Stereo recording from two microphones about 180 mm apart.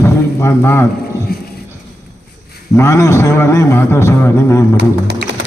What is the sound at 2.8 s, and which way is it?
A man's voice, 15° left (ahead or behind).